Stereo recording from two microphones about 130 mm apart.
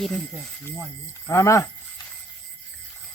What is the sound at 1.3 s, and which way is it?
Speech, 20° left (ahead or behind).